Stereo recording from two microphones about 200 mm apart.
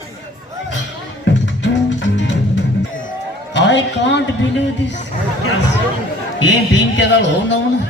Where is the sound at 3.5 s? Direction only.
60° left (ahead or behind).